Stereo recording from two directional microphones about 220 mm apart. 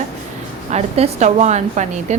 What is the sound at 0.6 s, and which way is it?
A woman's voice, 30° right (ahead or behind).